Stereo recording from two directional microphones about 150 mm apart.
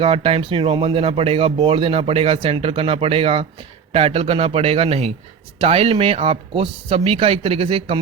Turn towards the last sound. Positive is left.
turn(degrees=-40)  # may be behind; listen again after turning